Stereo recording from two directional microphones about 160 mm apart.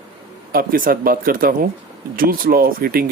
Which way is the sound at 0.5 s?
65° right (ahead or behind).